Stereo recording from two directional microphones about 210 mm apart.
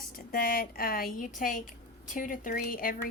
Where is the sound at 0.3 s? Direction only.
45° left (ahead or behind).